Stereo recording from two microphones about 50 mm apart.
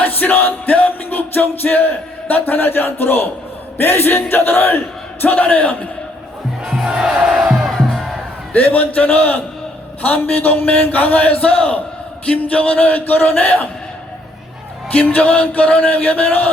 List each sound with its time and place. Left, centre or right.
0.0 s music: left
3.8 s a man's voice: left
6.7 s music: centre
8.5 s a man's voice: left
15.1 s a man's voice: left